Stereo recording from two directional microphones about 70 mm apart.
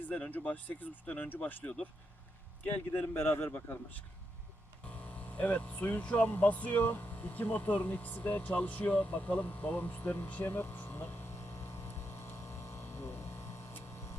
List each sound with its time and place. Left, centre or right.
0.1 s speech: left
2.9 s speech: left
4.9 s mains hum: left